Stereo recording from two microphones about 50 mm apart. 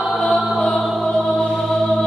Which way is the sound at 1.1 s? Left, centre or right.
Centre.